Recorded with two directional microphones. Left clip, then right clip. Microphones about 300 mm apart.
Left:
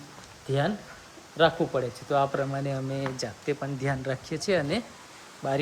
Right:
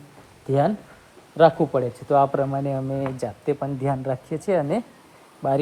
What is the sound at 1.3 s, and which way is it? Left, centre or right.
Speech, centre.